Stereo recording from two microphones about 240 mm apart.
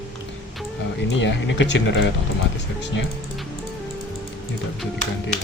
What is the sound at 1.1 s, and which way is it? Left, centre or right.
Speech, left.